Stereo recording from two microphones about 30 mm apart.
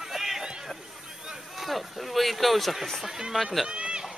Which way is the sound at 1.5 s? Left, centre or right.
Centre.